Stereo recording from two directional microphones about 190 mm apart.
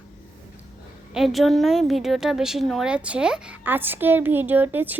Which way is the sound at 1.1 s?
Centre (ahead or behind).